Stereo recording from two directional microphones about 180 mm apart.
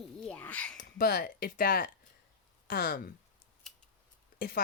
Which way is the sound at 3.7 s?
Centre (ahead or behind).